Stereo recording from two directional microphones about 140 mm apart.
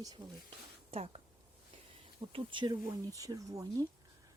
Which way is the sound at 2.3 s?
35° right (ahead or behind).